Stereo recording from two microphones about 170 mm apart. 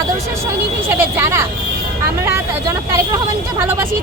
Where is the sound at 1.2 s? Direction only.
15° right (ahead or behind).